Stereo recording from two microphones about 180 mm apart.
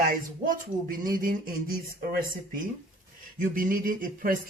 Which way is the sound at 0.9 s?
50° right (ahead or behind).